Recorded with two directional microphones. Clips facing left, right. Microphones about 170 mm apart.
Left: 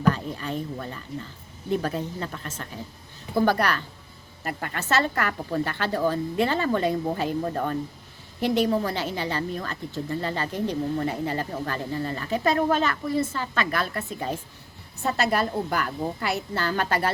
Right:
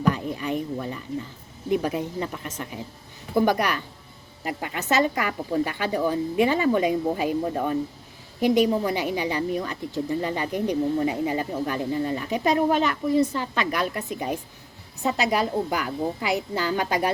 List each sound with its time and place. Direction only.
0.1 s a woman's voice: 15° right (ahead or behind)